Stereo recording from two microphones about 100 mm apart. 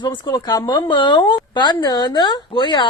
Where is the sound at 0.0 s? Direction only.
50° left (ahead or behind).